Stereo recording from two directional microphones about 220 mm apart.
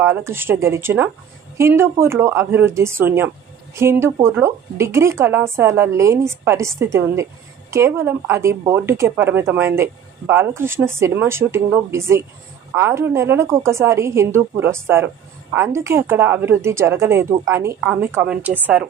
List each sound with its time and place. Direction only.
0.0 s speech: 10° right (ahead or behind)